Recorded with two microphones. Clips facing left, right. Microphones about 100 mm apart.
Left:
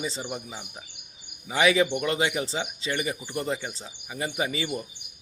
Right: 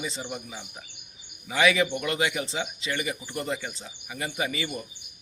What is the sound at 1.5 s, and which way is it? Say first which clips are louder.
A man's voice: left 1 dB; 25° left (ahead or behind).